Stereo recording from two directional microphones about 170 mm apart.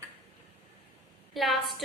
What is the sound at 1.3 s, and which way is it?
Speech, centre (ahead or behind).